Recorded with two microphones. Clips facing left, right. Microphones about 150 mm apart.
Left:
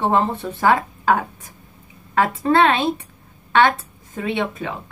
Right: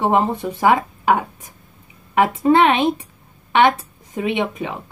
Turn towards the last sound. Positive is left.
turn(degrees=-20)  # may be behind; listen again after turning